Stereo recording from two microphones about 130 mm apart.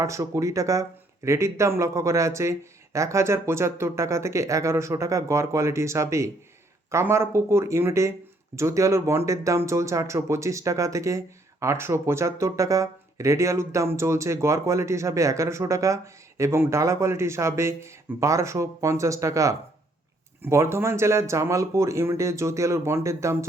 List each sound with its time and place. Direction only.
0.0 s speech: 25° right (ahead or behind)